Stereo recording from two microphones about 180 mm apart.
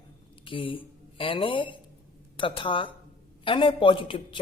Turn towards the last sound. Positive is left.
turn(degrees=30)  # may be behind; listen again after turning